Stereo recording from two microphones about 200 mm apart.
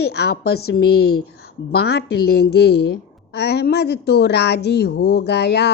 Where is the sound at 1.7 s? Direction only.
55° left (ahead or behind).